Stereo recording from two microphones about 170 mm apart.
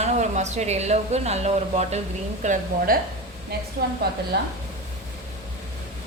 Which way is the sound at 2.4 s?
50° right (ahead or behind).